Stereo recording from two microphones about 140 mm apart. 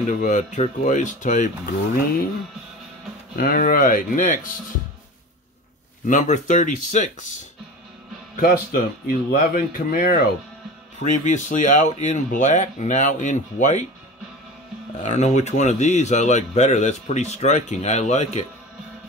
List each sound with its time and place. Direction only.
0.0 s speech: 65° left (ahead or behind)
3.3 s speech: 85° left
6.0 s speech: 65° left (ahead or behind)
8.4 s speech: 90° left
11.0 s speech: 60° left (ahead or behind)
15.0 s speech: 60° left (ahead or behind)